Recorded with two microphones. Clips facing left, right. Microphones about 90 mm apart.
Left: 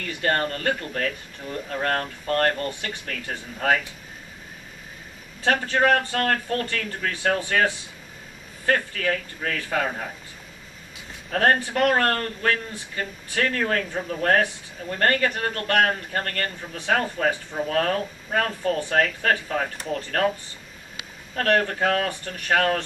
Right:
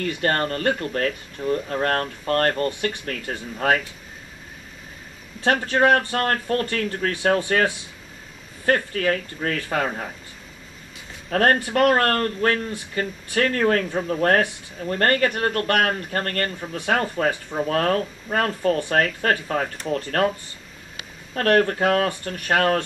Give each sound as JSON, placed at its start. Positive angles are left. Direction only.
{"t": 0.0, "sound": "speech", "side_deg": -35}
{"t": 5.4, "sound": "speech", "side_deg": -35}
{"t": 8.9, "sound": "speech", "side_deg": -35}
{"t": 11.7, "sound": "speech", "side_deg": -40}
{"t": 21.4, "sound": "speech", "side_deg": -35}